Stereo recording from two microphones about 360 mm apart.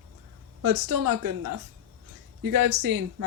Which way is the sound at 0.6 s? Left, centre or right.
Right.